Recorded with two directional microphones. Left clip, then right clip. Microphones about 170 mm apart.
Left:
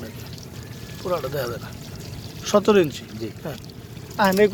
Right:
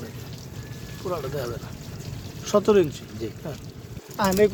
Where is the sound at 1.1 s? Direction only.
15° left (ahead or behind).